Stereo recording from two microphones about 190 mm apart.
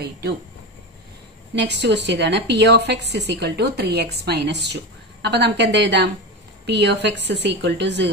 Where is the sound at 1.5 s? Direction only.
65° right (ahead or behind).